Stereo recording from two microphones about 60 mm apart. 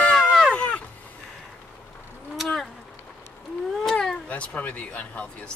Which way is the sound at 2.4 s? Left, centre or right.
Centre.